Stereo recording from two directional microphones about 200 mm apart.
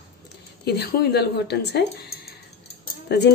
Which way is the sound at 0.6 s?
55° left (ahead or behind).